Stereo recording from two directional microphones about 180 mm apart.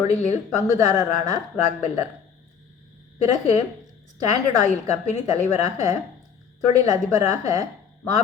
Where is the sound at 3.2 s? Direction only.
40° left (ahead or behind).